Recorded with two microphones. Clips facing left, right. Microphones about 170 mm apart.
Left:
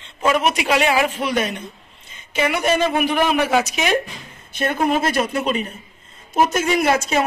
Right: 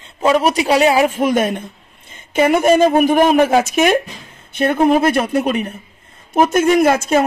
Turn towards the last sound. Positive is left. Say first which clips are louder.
# right 5 dB
turn(degrees=-50)  # may be behind; listen again after turning